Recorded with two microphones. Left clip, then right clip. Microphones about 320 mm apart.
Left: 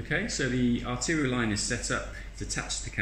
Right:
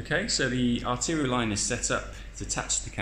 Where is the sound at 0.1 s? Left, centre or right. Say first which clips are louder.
Right 3 dB; centre.